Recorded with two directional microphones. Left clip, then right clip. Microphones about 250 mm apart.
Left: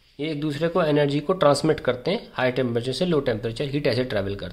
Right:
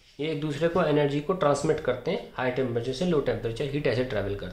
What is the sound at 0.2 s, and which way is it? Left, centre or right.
Speech, left.